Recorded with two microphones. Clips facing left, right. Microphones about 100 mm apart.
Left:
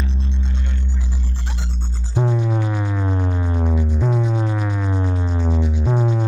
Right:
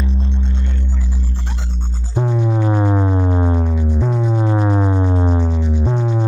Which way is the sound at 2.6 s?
35° right (ahead or behind).